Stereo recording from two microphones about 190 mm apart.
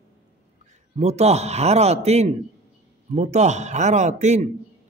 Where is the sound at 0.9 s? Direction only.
35° right (ahead or behind).